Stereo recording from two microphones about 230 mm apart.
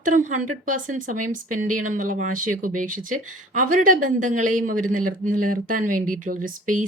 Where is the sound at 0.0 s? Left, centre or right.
Right.